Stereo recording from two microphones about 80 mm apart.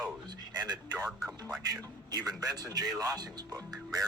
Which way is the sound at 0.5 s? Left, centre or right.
Right.